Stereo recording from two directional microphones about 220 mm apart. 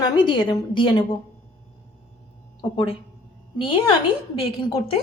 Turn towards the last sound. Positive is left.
turn(degrees=25)  # may be behind; listen again after turning